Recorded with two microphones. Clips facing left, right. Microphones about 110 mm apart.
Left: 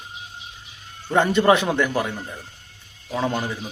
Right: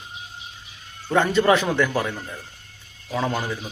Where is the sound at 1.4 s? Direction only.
20° left (ahead or behind).